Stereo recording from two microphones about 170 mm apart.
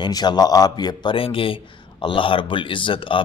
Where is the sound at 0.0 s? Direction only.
25° left (ahead or behind).